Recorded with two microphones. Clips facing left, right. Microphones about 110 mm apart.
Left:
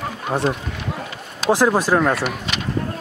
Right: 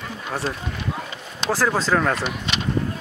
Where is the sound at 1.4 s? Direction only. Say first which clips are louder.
Left 5 dB; 20° left (ahead or behind).